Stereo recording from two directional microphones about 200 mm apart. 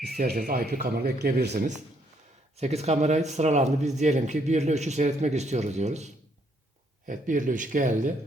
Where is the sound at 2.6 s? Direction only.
30° right (ahead or behind).